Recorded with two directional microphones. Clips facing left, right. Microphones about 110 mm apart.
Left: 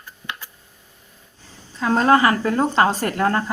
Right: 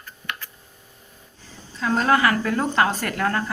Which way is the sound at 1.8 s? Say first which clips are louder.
Left 4 dB; 35° left (ahead or behind).